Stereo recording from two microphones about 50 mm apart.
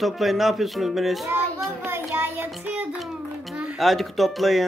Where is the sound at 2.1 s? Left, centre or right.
Right.